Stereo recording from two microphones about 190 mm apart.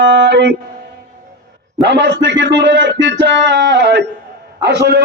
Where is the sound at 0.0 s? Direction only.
65° right (ahead or behind).